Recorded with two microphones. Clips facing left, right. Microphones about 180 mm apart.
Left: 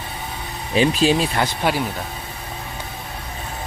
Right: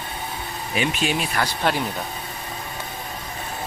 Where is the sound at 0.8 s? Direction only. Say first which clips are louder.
Left 7 dB; 30° left (ahead or behind).